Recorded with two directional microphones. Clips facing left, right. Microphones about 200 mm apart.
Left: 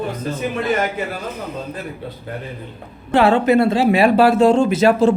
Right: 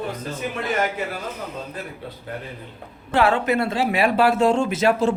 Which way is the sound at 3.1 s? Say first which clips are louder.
Left 6 dB; 30° left (ahead or behind).